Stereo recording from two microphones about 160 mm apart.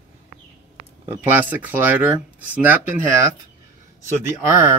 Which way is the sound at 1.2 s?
10° right (ahead or behind).